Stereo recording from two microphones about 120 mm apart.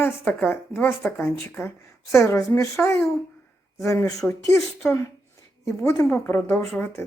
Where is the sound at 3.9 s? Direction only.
25° left (ahead or behind).